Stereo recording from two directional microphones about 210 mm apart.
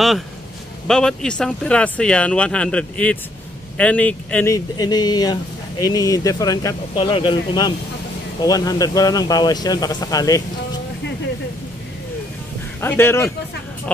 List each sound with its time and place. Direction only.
0.8 s speech: 5° left (ahead or behind)
4.7 s speech: 20° left (ahead or behind)
12.8 s speech: 10° left (ahead or behind)